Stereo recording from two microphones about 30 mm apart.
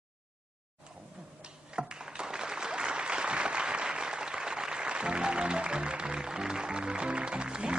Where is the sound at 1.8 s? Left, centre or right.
Right.